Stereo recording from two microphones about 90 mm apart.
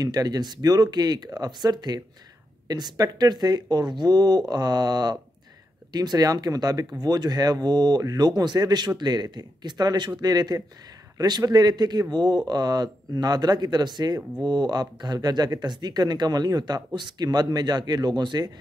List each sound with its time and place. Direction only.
0.0 s speech: 45° right (ahead or behind)